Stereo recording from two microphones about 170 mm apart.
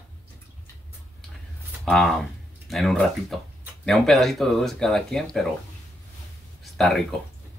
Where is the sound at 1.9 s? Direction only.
5° left (ahead or behind).